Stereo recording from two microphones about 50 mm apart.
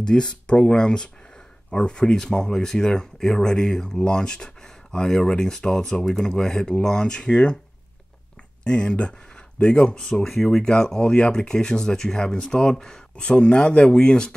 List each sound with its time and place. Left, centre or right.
0.0 s speech: centre
8.6 s speech: centre